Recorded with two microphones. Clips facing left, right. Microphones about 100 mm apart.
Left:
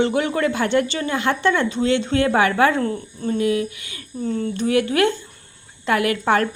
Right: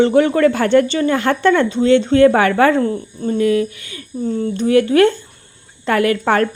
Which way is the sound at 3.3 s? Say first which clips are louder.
Right 5 dB; 40° right (ahead or behind).